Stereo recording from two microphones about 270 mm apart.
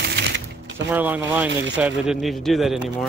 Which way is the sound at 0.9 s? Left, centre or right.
Centre.